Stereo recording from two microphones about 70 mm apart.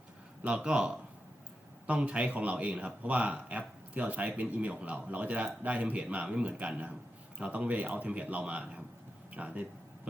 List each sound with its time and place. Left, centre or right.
0.4 s a man's voice: centre